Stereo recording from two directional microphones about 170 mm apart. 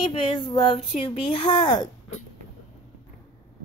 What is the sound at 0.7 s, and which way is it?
Speech, 40° left (ahead or behind).